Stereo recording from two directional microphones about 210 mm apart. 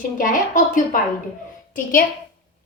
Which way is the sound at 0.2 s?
40° left (ahead or behind).